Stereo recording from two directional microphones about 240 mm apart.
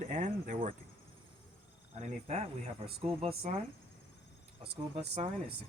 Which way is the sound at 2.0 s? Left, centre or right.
Right.